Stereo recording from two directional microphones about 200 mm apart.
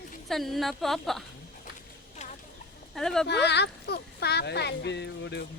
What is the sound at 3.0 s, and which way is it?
Speech, centre (ahead or behind).